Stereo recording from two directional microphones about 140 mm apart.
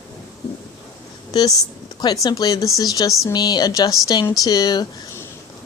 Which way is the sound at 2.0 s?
25° left (ahead or behind).